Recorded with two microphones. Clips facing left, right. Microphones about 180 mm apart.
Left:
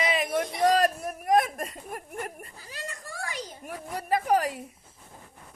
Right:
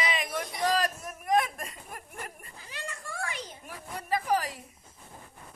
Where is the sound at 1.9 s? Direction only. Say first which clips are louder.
Left 8 dB; 45° left (ahead or behind).